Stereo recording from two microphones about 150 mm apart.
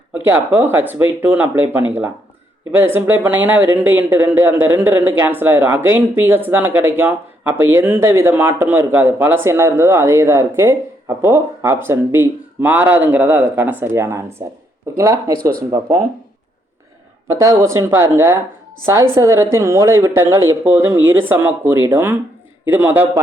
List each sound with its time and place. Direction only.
0.1 s speech: 15° right (ahead or behind)
17.2 s speech: 20° right (ahead or behind)